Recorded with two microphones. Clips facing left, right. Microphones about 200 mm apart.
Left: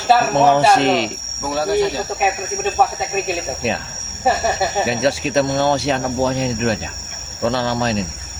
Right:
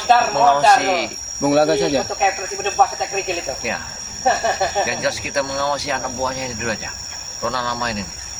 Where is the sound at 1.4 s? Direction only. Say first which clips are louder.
Right 3 dB; 65° right (ahead or behind).